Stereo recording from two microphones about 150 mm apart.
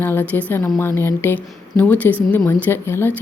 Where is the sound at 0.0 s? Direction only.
15° left (ahead or behind).